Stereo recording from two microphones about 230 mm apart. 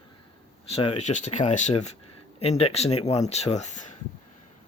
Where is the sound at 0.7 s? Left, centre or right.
Left.